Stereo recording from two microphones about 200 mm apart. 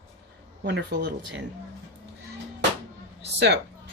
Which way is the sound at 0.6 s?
55° right (ahead or behind).